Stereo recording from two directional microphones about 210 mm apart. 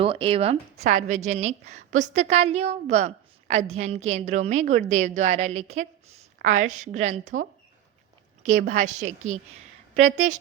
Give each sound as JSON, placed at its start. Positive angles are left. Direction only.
{"t": 0.0, "sound": "speech", "side_deg": -25}
{"t": 0.8, "sound": "a woman's voice", "side_deg": -35}
{"t": 8.4, "sound": "a woman's voice", "side_deg": -35}